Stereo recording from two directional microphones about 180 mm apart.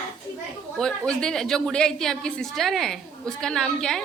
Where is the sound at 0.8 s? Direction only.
5° left (ahead or behind).